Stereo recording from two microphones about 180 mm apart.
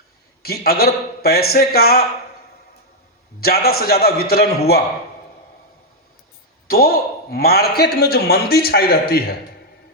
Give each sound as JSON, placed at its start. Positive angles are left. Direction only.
{"t": 0.4, "sound": "speech", "side_deg": 60}
{"t": 3.4, "sound": "speech", "side_deg": 60}
{"t": 6.7, "sound": "speech", "side_deg": 55}